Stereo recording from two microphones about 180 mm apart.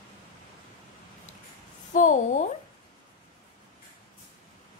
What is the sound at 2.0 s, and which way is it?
Speech, 45° left (ahead or behind).